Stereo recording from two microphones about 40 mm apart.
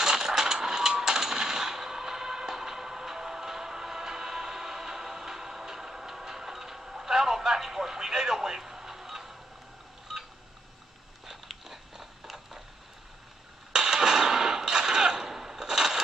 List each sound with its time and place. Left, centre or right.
0.0 s coin: centre
10.1 s telephone dialing: centre
11.4 s biting: centre
13.7 s a sound: centre